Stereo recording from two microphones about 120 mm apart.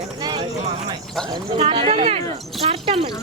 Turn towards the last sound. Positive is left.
turn(degrees=-50)  # may be behind; listen again after turning